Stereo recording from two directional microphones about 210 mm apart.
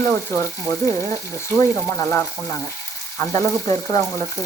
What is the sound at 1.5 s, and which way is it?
Frying, 10° left (ahead or behind).